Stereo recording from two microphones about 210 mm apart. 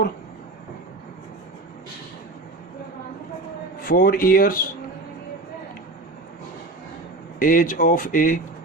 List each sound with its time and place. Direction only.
3.8 s speech: 45° left (ahead or behind)
7.3 s speech: 40° left (ahead or behind)